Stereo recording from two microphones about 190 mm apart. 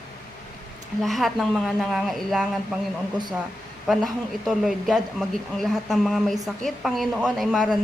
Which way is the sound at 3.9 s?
Centre (ahead or behind).